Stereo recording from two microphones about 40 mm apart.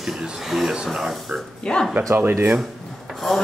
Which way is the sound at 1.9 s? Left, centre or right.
Right.